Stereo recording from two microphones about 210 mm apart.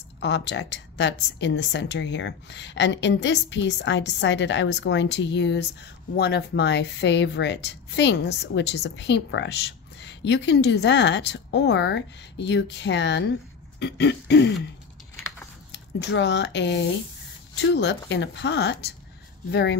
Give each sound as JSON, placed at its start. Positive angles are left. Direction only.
{"t": 0.2, "sound": "a woman's voice", "side_deg": 55}
{"t": 15.7, "sound": "a woman's voice", "side_deg": 55}